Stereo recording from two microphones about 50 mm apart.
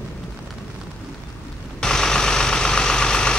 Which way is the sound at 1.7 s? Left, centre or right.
Centre.